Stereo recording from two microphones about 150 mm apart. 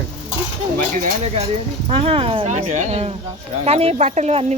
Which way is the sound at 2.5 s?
55° right (ahead or behind).